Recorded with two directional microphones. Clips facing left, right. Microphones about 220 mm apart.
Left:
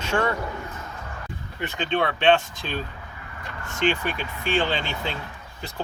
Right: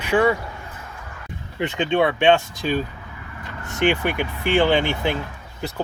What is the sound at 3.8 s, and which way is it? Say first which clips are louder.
Speech: right 4 dB; 10° right (ahead or behind).